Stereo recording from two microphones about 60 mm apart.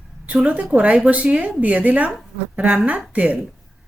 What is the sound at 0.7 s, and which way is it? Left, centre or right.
A woman's voice, right.